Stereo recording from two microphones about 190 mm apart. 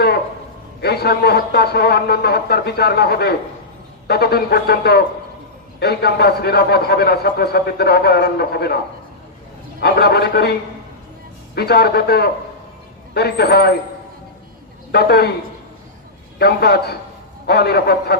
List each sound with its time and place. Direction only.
0.8 s a man's voice: 55° left (ahead or behind)
9.8 s a man's voice: 55° left (ahead or behind)
11.5 s a man's voice: 55° left (ahead or behind)
14.9 s a man's voice: 55° left (ahead or behind)
16.4 s a man's voice: 55° left (ahead or behind)